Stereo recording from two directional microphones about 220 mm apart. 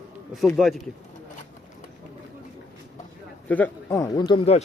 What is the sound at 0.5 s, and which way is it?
Speech, centre (ahead or behind).